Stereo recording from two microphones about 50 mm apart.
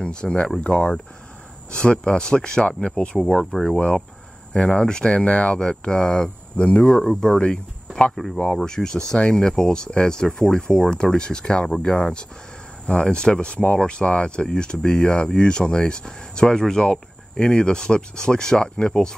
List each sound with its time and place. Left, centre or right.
0.0 s speech: centre
3.5 s speech: centre
4.6 s speech: centre
6.5 s speech: left
6.8 s speech: centre